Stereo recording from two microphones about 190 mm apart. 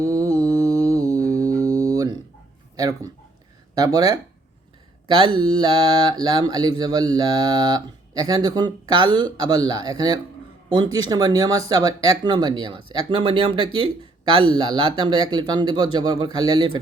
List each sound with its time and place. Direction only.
0.0 s music: 15° right (ahead or behind)
2.7 s mantra: 20° right (ahead or behind)